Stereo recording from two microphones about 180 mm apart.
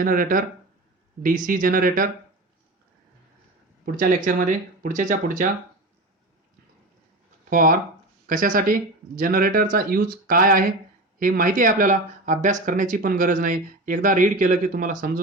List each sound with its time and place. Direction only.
0.0 s speech: 50° right (ahead or behind)
3.8 s speech: 50° right (ahead or behind)
7.5 s speech: 50° right (ahead or behind)